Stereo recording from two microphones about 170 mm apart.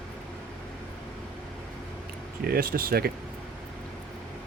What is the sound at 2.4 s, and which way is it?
Speech, 60° right (ahead or behind).